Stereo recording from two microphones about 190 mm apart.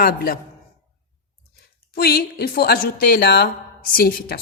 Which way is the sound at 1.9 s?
55° left (ahead or behind).